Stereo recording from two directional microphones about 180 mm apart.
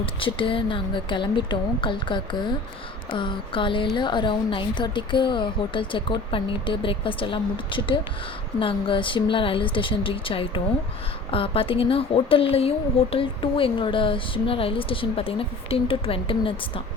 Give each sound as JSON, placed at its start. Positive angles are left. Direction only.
{"t": 0.0, "sound": "speech", "side_deg": 30}